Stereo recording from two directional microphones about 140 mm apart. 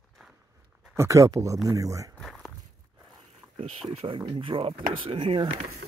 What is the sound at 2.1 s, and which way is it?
Walk, 5° left (ahead or behind).